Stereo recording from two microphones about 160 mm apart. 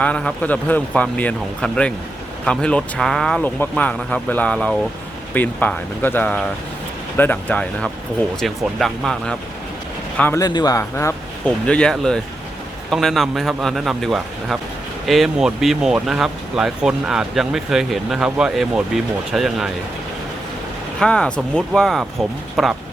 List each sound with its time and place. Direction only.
0.0 s speech: 5° left (ahead or behind)
10.2 s speech: 10° left (ahead or behind)
10.4 s speech: 25° left (ahead or behind)
11.4 s speech: 5° left (ahead or behind)
21.0 s speech: 5° left (ahead or behind)